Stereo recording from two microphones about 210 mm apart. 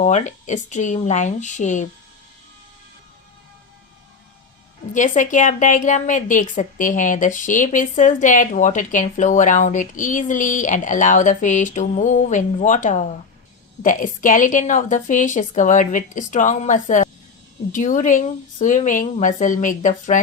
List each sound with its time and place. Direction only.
0.0 s a woman's voice: 35° left (ahead or behind)
4.9 s a woman's voice: 35° left (ahead or behind)